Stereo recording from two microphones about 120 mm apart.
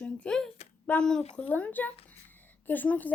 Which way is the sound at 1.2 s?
60° left (ahead or behind).